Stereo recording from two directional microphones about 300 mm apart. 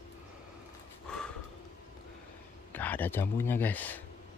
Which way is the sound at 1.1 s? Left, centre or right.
Centre.